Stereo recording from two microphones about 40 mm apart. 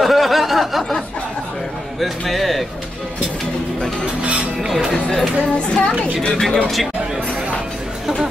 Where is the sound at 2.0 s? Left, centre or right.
Centre.